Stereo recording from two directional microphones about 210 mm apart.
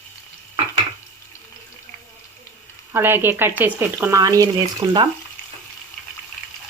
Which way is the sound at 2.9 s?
10° right (ahead or behind).